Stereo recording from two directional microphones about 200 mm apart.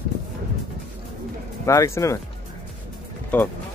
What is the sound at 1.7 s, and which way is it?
Speech, 15° left (ahead or behind).